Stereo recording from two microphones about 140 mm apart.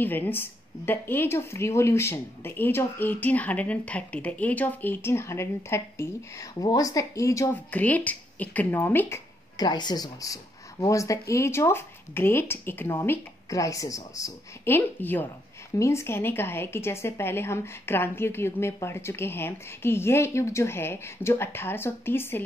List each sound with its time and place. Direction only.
0.0 s speech: 15° left (ahead or behind)
7.7 s speech: 10° left (ahead or behind)
9.6 s speech: 30° left (ahead or behind)